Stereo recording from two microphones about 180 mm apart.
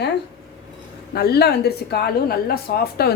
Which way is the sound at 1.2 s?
60° left (ahead or behind).